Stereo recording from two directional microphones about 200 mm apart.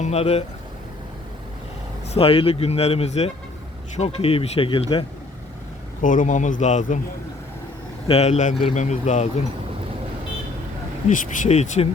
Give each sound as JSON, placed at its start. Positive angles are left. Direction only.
{"t": 0.0, "sound": "speech", "side_deg": 30}
{"t": 2.1, "sound": "a man's voice", "side_deg": 30}
{"t": 6.0, "sound": "speech", "side_deg": 40}
{"t": 8.0, "sound": "speech", "side_deg": 30}
{"t": 11.1, "sound": "speech", "side_deg": 40}